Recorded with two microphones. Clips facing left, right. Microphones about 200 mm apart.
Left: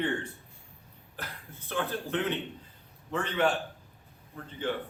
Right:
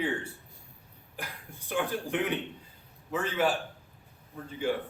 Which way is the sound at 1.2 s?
15° right (ahead or behind).